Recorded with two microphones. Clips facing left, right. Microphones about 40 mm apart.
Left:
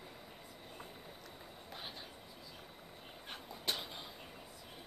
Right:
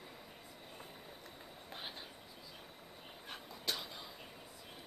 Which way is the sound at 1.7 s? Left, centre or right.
Centre.